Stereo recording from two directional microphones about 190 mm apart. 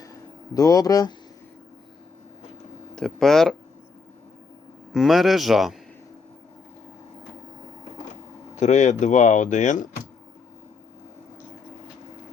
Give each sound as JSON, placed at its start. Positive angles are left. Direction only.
{"t": 0.5, "sound": "speech", "side_deg": 20}
{"t": 2.9, "sound": "speech", "side_deg": 5}
{"t": 4.9, "sound": "speech", "side_deg": 0}
{"t": 8.5, "sound": "speech", "side_deg": 35}